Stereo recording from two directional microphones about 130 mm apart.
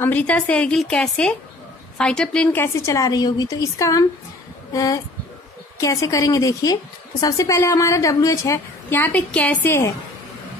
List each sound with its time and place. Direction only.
0.0 s a woman's voice: 10° left (ahead or behind)
8.9 s a woman's voice: 10° left (ahead or behind)